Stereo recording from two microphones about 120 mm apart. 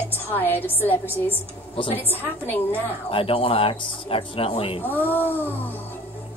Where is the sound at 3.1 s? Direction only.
50° left (ahead or behind).